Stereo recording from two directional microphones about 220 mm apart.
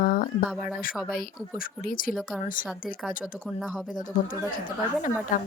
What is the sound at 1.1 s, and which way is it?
Speech, 40° left (ahead or behind).